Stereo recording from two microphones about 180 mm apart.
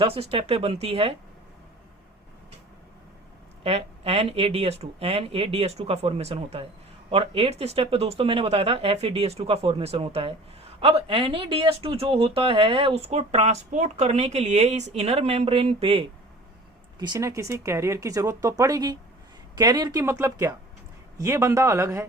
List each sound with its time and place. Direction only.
0.0 s speech: 30° right (ahead or behind)
3.6 s speech: 35° right (ahead or behind)
17.0 s speech: 20° right (ahead or behind)